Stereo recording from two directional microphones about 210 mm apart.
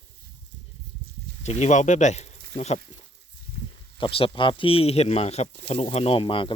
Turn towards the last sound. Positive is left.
turn(degrees=25)  # may be behind; listen again after turning